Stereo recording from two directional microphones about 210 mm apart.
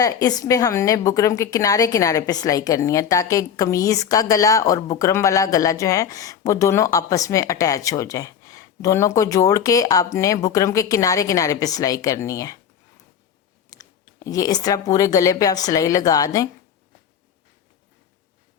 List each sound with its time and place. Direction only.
0.0 s a woman's voice: 15° left (ahead or behind)
13.7 s a woman's voice: 15° left (ahead or behind)